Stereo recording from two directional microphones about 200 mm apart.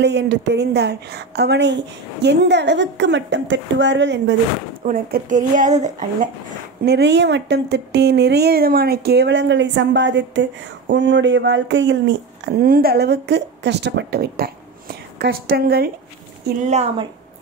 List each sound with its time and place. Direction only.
0.0 s speech: 60° right (ahead or behind)
4.8 s speech: 40° right (ahead or behind)
6.8 s speech: 55° right (ahead or behind)
16.6 s speech: 30° right (ahead or behind)